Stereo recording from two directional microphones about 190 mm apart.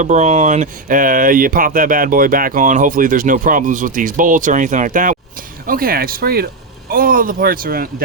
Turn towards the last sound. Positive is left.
turn(degrees=-50)  # may be behind; listen again after turning